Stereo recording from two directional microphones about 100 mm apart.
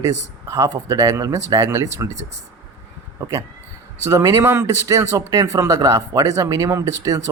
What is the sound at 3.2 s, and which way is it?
Speech, 35° right (ahead or behind).